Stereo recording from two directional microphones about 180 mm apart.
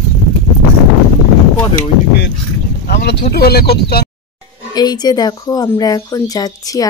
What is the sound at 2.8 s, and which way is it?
Speech, 65° left (ahead or behind).